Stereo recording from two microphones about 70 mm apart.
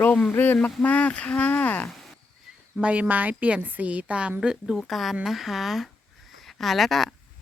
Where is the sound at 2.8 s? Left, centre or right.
Right.